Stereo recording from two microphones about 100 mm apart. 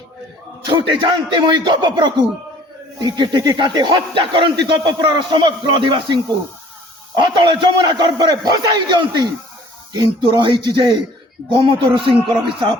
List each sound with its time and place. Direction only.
0.7 s a man's voice: 55° right (ahead or behind)
7.2 s a man's voice: 50° right (ahead or behind)